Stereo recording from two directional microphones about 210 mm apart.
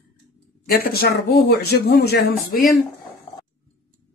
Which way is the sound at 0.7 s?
45° left (ahead or behind).